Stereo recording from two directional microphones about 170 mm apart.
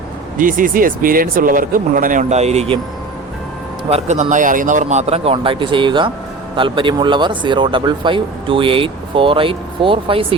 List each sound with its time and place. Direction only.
0.3 s speech: 55° right (ahead or behind)
3.8 s speech: 40° right (ahead or behind)